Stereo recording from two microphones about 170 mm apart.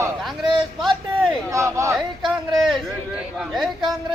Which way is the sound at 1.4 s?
20° right (ahead or behind).